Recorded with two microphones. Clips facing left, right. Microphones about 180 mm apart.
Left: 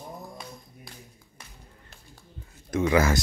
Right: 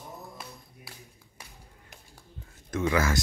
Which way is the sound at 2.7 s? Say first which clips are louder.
Left 4 dB; 15° left (ahead or behind).